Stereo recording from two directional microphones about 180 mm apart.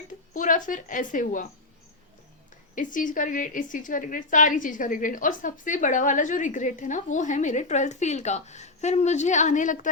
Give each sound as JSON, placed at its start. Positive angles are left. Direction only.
{"t": 0.3, "sound": "a woman's voice", "side_deg": 45}
{"t": 2.7, "sound": "a woman's voice", "side_deg": 45}